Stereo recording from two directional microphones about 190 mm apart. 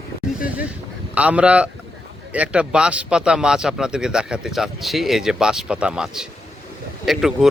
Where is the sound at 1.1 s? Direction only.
5° right (ahead or behind).